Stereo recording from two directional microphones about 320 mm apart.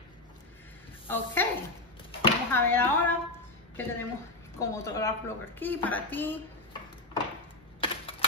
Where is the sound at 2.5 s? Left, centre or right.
Centre.